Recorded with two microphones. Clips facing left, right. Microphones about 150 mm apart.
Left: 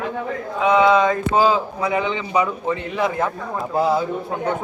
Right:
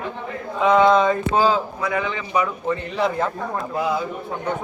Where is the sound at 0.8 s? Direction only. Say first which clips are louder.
Even; 5° left (ahead or behind).